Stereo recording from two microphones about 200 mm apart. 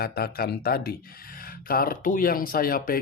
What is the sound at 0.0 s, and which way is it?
Speech, 50° left (ahead or behind).